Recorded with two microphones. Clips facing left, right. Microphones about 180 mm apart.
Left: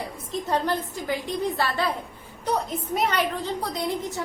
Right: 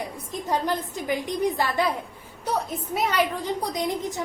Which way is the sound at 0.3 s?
15° right (ahead or behind).